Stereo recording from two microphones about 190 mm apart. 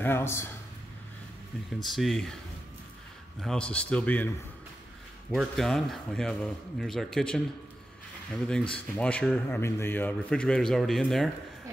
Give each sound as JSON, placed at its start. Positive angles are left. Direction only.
{"t": 0.0, "sound": "a man's voice", "side_deg": 10}
{"t": 1.8, "sound": "a man's voice", "side_deg": 0}
{"t": 3.3, "sound": "a man's voice", "side_deg": 5}
{"t": 5.3, "sound": "a man's voice", "side_deg": 0}
{"t": 8.7, "sound": "a man's voice", "side_deg": 5}